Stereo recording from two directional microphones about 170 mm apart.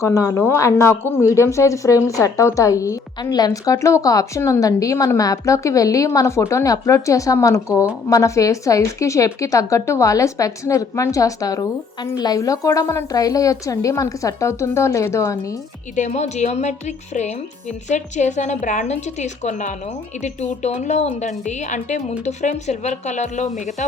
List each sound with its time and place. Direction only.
0.0 s a woman's voice: 20° left (ahead or behind)
16.0 s a woman's voice: 45° left (ahead or behind)
20.8 s a woman's voice: 45° left (ahead or behind)